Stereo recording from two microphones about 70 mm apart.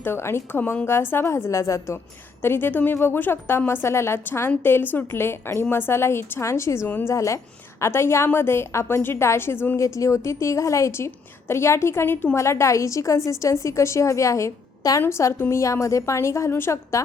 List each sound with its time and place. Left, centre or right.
0.0 s a woman's voice: left
2.4 s a woman's voice: left
6.8 s a woman's voice: left
7.1 s a woman's voice: left
9.7 s a woman's voice: left
15.2 s a woman's voice: left